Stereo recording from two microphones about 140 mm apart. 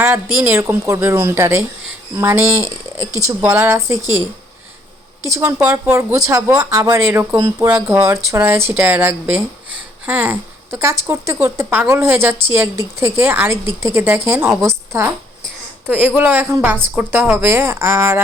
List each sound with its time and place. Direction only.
0.3 s speech: 10° right (ahead or behind)
5.7 s speech: 20° right (ahead or behind)
7.3 s speech: 30° right (ahead or behind)
7.7 s speech: 10° right (ahead or behind)